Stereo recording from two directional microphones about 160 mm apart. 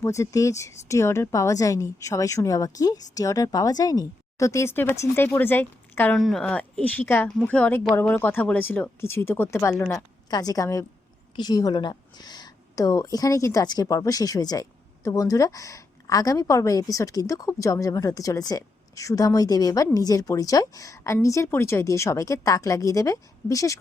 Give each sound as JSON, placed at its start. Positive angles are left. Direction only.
{"t": 0.0, "sound": "a woman's voice", "side_deg": 20}
{"t": 6.1, "sound": "a woman's voice", "side_deg": 0}